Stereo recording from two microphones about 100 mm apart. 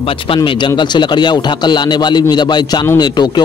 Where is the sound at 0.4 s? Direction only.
50° left (ahead or behind).